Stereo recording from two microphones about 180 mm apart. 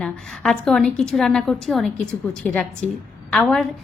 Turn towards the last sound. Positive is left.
turn(degrees=5)  # may be behind; listen again after turning